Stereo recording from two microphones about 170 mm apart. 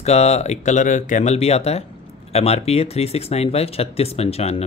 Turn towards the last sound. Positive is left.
turn(degrees=40)  # may be behind; listen again after turning